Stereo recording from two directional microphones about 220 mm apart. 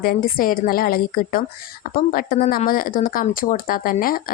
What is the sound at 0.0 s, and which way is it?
Speech, 40° left (ahead or behind).